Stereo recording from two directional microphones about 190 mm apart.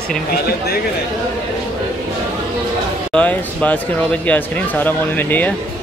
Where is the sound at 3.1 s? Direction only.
5° left (ahead or behind).